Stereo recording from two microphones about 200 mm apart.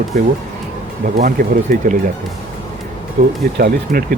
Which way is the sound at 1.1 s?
45° right (ahead or behind).